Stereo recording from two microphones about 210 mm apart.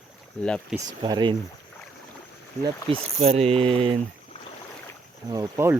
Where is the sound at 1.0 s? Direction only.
20° right (ahead or behind).